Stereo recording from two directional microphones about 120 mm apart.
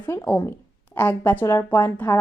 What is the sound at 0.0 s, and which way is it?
A woman's voice, 20° left (ahead or behind).